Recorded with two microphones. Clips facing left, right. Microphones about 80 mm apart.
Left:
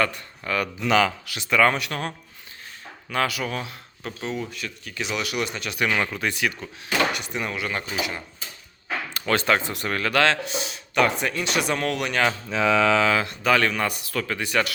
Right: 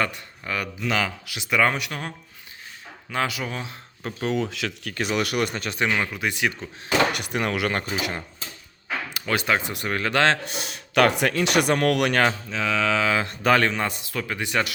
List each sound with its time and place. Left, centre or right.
0.0 s speech: centre
0.8 s speech: centre
1.4 s speech: centre
4.2 s speech: right
4.9 s speech: right
6.0 s speech: centre
6.3 s speech: right
7.1 s speech: right
9.1 s speech: centre; by 10.3 s right
10.6 s speech: right
12.5 s mantra: centre
13.2 s speech: right
13.7 s speech: right